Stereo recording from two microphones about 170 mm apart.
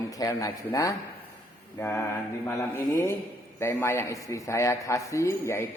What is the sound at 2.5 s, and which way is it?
A man's voice, 15° left (ahead or behind).